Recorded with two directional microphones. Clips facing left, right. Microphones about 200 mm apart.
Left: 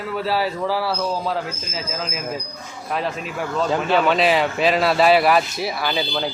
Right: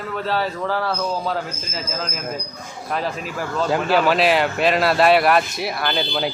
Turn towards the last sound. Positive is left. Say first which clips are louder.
# right 1 dB
turn(degrees=0)  # may be behind; listen again after turning